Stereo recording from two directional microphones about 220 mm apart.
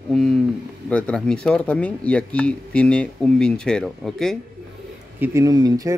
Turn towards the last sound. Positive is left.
turn(degrees=-15)  # may be behind; listen again after turning